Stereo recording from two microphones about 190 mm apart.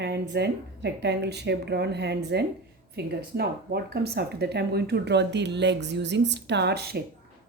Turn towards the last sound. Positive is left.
turn(degrees=-55)  # may be behind; listen again after turning